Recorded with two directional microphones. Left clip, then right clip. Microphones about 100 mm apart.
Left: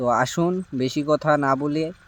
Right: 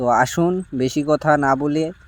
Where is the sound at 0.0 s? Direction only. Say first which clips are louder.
Right 4 dB; 35° right (ahead or behind).